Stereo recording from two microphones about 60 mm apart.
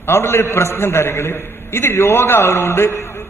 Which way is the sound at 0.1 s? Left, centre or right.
Left.